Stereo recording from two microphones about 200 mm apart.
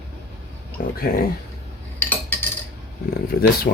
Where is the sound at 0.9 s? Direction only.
50° left (ahead or behind).